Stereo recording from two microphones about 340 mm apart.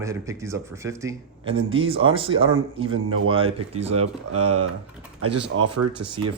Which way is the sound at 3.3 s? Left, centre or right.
Centre.